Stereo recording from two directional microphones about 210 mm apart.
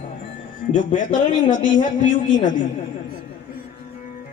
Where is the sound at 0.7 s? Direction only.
40° left (ahead or behind).